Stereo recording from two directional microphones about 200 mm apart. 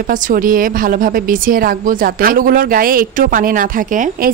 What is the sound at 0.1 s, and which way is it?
A woman's voice, 45° right (ahead or behind).